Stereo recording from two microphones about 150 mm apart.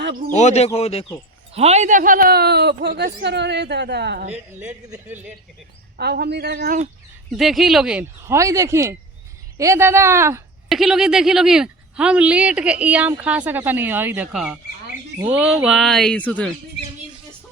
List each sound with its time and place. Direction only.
0.3 s speech: 50° left (ahead or behind)
1.5 s speech: 45° right (ahead or behind); by 4.3 s 90° right
4.3 s speech: 10° right (ahead or behind)
6.0 s speech: 90° right
7.3 s speech: centre (ahead or behind)
8.3 s speech: 20° right (ahead or behind)
10.7 s speech: centre (ahead or behind)